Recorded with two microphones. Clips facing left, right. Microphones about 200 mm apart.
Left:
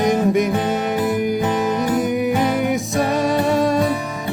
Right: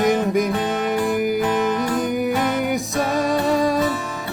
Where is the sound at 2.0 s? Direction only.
Centre (ahead or behind).